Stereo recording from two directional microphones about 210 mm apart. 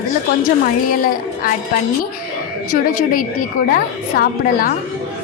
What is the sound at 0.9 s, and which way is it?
Speech, 45° left (ahead or behind).